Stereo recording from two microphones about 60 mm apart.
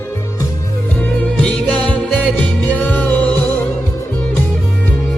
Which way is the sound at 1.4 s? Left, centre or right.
Centre.